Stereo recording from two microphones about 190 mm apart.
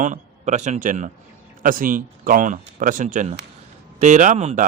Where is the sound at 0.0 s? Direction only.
40° right (ahead or behind).